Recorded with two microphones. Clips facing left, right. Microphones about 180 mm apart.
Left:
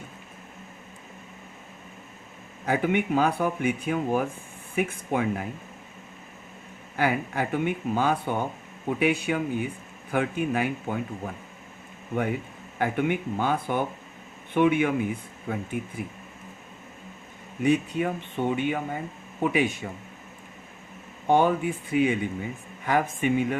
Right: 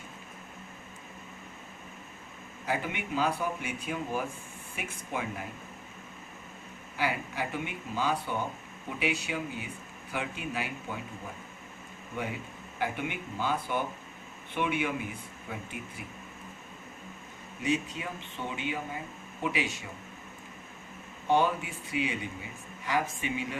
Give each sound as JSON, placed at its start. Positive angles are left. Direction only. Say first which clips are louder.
{"t": 2.6, "sound": "speech", "louder": "left 9 dB", "side_deg": 55}
{"t": 6.9, "sound": "speech", "louder": "left 7 dB", "side_deg": 55}
{"t": 12.8, "sound": "speech", "louder": "left 8 dB", "side_deg": 55}
{"t": 17.6, "sound": "speech", "louder": "left 8 dB", "side_deg": 55}
{"t": 21.2, "sound": "speech", "louder": "left 5 dB", "side_deg": 50}